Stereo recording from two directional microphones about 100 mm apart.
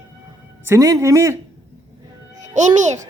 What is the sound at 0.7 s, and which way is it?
Speech, 35° right (ahead or behind).